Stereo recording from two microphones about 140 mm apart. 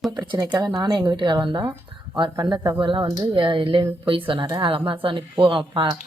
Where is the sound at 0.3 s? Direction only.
30° right (ahead or behind).